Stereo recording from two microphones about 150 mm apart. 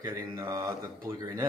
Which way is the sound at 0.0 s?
20° right (ahead or behind).